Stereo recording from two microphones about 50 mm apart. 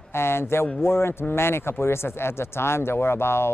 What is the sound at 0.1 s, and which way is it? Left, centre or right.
Speech, left.